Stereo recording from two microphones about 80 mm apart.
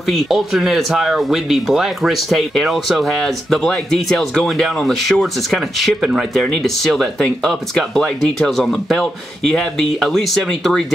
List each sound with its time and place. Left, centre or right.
0.1 s speech: centre